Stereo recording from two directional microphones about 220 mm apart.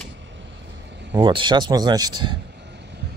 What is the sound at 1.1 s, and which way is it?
Speech, 20° right (ahead or behind).